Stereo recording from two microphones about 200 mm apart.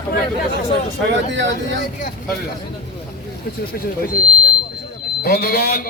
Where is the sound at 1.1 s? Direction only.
65° right (ahead or behind).